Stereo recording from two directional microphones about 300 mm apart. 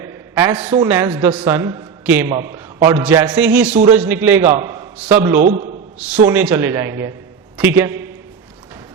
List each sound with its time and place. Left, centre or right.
0.0 s a sound: centre
0.9 s a man's voice: centre
5.4 s a man's voice: right
6.0 s a man's voice: centre